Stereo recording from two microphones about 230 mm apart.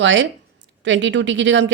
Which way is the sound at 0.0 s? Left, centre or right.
Right.